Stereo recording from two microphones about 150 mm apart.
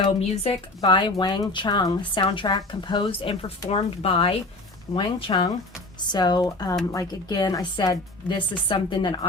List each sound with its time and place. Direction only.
0.0 s speech: 30° left (ahead or behind)